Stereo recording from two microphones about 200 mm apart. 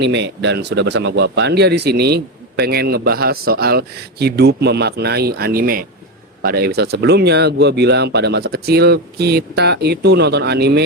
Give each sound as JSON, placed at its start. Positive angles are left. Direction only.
{"t": 0.0, "sound": "speech", "side_deg": -60}